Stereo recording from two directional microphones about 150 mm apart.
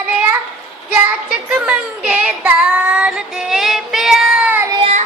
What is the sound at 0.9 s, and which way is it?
Child singing, 10° right (ahead or behind).